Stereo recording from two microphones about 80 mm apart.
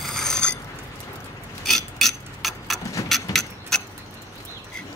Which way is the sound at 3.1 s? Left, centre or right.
Centre.